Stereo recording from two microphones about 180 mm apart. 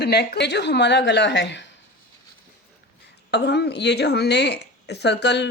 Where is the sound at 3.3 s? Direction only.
65° left (ahead or behind).